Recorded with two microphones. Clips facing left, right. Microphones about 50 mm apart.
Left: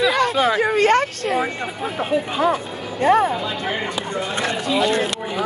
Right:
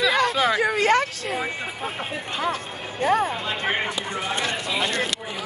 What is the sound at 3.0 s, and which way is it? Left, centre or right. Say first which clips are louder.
Speech: left 5 dB; left.